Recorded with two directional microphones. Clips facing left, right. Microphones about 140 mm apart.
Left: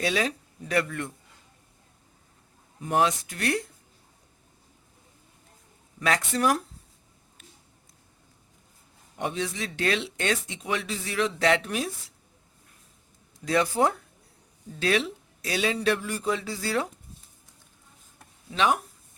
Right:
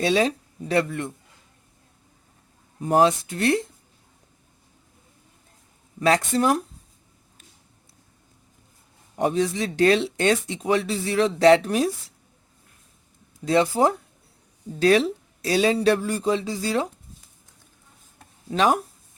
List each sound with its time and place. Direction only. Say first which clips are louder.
0.0 s speech: right 6 dB; 30° right (ahead or behind)
2.8 s speech: right 6 dB; 35° right (ahead or behind)
6.0 s speech: right 5 dB; 30° right (ahead or behind)
9.1 s speech: right 8 dB; 40° right (ahead or behind)
13.4 s speech: right 4 dB; 30° right (ahead or behind)
14.8 s speech: right 8 dB; 40° right (ahead or behind); by 16.9 s 20° right (ahead or behind)
18.5 s speech: right 4 dB; 40° right (ahead or behind)